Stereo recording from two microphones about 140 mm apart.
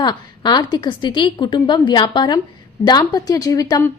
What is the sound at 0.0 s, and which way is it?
A woman's voice, 30° left (ahead or behind).